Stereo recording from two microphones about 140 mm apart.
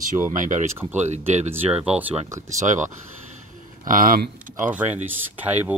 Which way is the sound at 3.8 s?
80° right.